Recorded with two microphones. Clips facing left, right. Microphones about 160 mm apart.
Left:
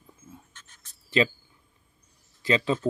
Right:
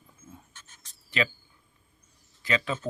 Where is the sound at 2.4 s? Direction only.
30° left (ahead or behind).